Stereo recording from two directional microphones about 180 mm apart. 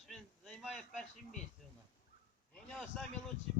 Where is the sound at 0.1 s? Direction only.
Centre (ahead or behind).